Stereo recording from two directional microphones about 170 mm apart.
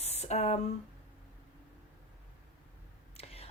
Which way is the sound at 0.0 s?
40° left (ahead or behind).